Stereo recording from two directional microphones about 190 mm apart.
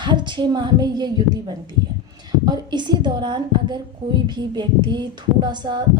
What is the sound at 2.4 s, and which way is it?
A woman's voice, 20° right (ahead or behind).